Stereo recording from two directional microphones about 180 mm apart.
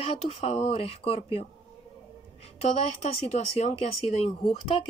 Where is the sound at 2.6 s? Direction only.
35° left (ahead or behind).